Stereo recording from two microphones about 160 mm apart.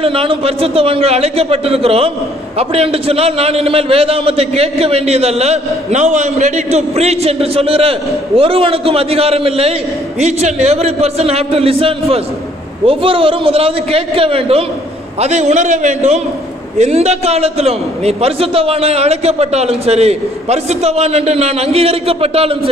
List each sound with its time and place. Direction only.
0.0 s a man's voice: 35° right (ahead or behind)